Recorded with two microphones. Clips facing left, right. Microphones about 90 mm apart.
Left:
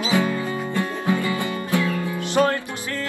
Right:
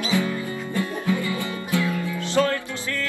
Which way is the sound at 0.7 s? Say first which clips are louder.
Even; 20° left (ahead or behind).